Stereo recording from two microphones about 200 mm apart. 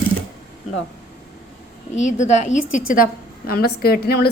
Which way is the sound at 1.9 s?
35° left (ahead or behind).